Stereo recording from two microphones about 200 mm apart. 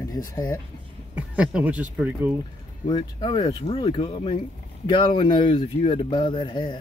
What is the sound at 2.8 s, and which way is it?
Speech, 25° left (ahead or behind).